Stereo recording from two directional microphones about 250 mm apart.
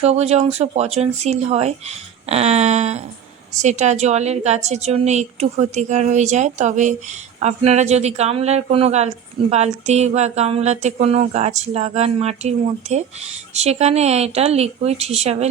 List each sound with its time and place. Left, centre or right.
0.0 s speech: right